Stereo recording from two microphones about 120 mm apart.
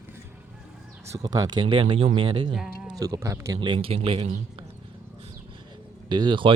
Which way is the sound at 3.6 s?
45° right (ahead or behind).